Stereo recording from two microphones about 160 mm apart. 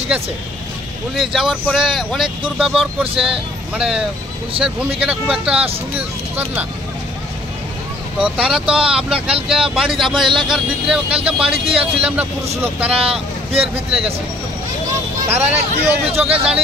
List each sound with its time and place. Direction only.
1.1 s speech: centre (ahead or behind)
8.2 s speech: 5° right (ahead or behind)
13.5 s speech: 35° right (ahead or behind)
15.4 s speech: 40° right (ahead or behind)